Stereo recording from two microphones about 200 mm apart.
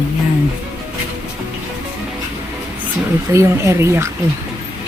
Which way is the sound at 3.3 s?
15° right (ahead or behind).